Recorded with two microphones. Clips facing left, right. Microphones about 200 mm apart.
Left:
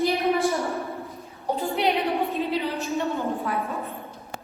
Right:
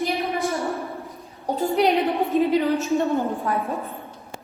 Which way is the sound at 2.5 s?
50° right (ahead or behind).